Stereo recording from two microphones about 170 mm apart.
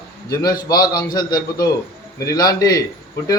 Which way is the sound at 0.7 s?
25° left (ahead or behind).